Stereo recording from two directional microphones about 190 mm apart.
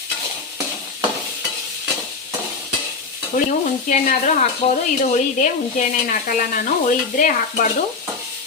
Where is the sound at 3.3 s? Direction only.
40° left (ahead or behind).